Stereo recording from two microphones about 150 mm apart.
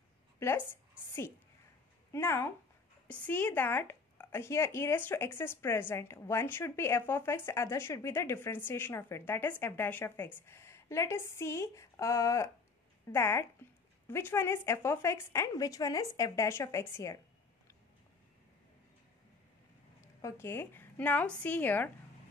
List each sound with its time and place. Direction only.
0.4 s a woman's voice: 15° left (ahead or behind)
20.2 s speech: 20° left (ahead or behind)